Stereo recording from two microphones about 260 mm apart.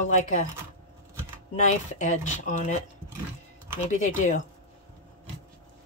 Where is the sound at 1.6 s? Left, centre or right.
Left.